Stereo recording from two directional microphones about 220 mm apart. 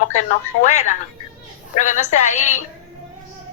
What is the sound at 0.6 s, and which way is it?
A woman's voice, 30° left (ahead or behind).